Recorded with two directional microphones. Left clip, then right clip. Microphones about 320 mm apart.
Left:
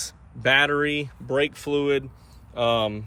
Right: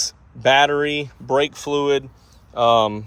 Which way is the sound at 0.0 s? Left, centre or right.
Centre.